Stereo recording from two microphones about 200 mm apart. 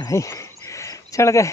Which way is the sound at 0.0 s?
15° left (ahead or behind).